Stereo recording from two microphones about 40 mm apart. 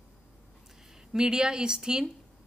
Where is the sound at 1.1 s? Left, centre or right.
Centre.